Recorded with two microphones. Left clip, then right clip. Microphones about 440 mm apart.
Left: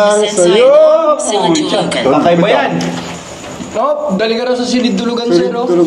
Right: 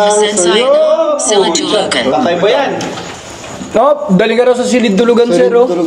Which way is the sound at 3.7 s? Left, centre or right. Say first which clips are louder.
Right 4 dB; right.